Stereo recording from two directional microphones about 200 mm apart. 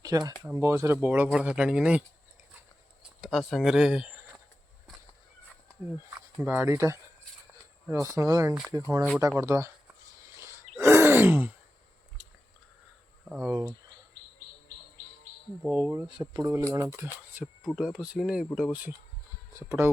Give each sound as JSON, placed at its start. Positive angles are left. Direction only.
{"t": 0.0, "sound": "speech", "side_deg": -20}
{"t": 3.2, "sound": "speech", "side_deg": 0}
{"t": 6.4, "sound": "speech", "side_deg": -10}
{"t": 10.3, "sound": "gasp", "side_deg": -15}
{"t": 13.4, "sound": "speech", "side_deg": -15}
{"t": 15.6, "sound": "speech", "side_deg": -5}